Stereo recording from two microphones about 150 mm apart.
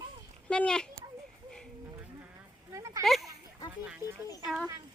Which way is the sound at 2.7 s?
20° right (ahead or behind).